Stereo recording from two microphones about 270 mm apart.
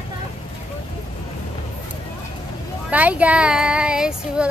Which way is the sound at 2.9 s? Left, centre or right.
Centre.